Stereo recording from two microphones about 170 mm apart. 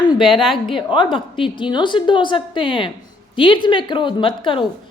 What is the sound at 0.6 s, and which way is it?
A woman's voice, 30° left (ahead or behind).